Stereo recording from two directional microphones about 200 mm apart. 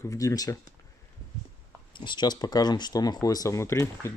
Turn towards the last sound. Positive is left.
turn(degrees=15)  # may be behind; listen again after turning